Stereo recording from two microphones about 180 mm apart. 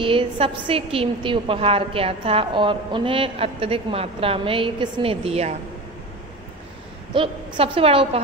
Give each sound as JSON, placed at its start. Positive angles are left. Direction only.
{"t": 0.0, "sound": "a woman's voice", "side_deg": -30}
{"t": 7.2, "sound": "a woman's voice", "side_deg": -30}